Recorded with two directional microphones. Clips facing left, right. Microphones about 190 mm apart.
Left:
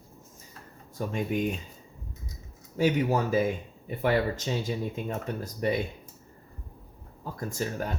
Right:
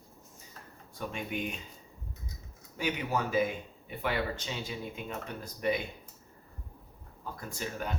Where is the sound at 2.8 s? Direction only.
40° left (ahead or behind).